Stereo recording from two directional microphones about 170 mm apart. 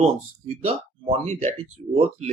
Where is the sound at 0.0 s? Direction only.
40° right (ahead or behind).